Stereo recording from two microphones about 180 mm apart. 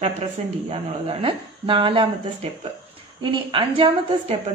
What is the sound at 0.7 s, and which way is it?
Speech, 30° right (ahead or behind).